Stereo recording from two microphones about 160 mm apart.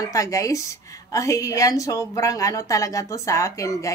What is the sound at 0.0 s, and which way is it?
A woman's voice, 20° left (ahead or behind).